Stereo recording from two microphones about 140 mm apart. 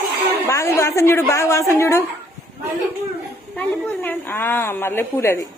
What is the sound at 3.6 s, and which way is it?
A woman's voice, 10° left (ahead or behind).